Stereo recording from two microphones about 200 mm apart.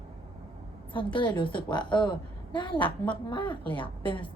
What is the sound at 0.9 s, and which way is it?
A woman's voice, 25° left (ahead or behind).